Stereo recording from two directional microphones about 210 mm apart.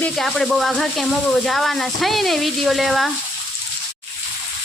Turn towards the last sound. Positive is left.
turn(degrees=0)  # may be behind; listen again after turning